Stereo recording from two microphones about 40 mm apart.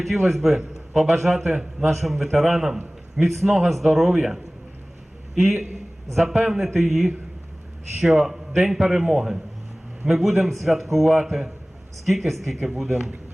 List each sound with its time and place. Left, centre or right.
0.0 s a man's voice: centre
2.3 s a man's voice: centre
5.4 s a man's voice: centre